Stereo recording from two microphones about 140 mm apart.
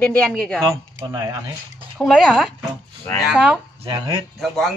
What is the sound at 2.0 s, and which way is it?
Speech, centre (ahead or behind).